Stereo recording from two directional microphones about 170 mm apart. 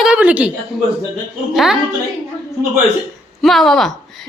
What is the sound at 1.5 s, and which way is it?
Speech, 5° right (ahead or behind).